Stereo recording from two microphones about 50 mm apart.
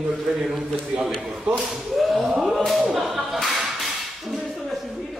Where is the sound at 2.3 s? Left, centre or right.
Centre.